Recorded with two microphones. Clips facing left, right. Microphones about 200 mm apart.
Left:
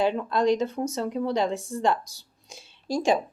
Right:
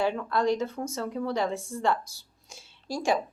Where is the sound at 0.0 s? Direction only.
20° left (ahead or behind).